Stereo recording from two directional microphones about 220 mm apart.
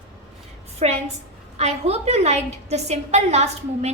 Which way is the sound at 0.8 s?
30° right (ahead or behind).